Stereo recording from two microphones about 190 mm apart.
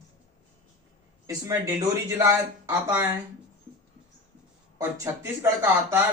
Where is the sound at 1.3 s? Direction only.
15° right (ahead or behind).